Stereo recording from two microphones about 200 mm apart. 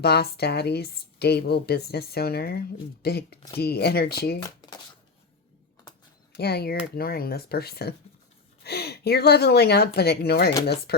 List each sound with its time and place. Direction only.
0.0 s a woman's voice: 55° left (ahead or behind)
4.4 s shuffling cards: 20° left (ahead or behind)
6.3 s a woman's voice: 55° left (ahead or behind)